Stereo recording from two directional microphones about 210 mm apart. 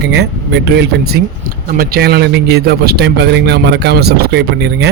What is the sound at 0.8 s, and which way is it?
Speech, 50° right (ahead or behind).